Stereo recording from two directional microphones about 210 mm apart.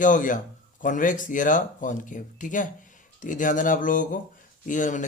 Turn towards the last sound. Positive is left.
turn(degrees=35)  # may be behind; listen again after turning